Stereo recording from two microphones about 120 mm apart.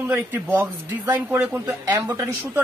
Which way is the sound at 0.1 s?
15° right (ahead or behind).